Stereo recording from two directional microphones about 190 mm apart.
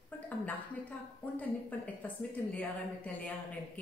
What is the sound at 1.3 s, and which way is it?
A woman's voice, 10° left (ahead or behind).